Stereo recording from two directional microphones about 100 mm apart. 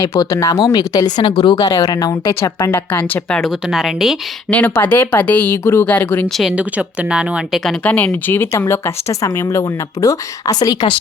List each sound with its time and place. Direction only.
0.1 s speech: 40° left (ahead or behind); by 3.4 s 10° left (ahead or behind)
3.4 s speech: centre (ahead or behind)
4.5 s speech: 15° left (ahead or behind)
6.2 s speech: centre (ahead or behind)
6.6 s speech: 15° right (ahead or behind)
7.9 s speech: 15° left (ahead or behind); by 10.9 s 45° left (ahead or behind)